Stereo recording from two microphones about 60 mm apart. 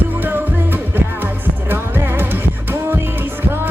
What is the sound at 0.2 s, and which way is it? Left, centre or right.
Music, right.